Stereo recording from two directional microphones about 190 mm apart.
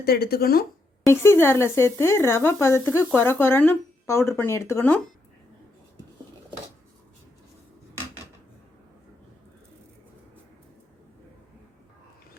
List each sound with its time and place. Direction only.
0.0 s speech: 55° left (ahead or behind)
1.0 s speech: 15° left (ahead or behind)